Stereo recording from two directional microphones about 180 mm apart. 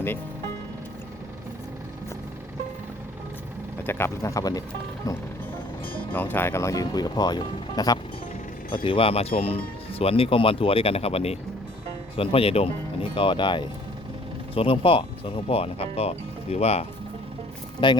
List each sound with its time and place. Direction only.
3.8 s speech: 15° left (ahead or behind)